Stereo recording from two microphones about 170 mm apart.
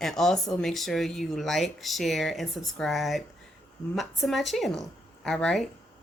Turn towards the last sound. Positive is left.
turn(degrees=0)  # may be behind; listen again after turning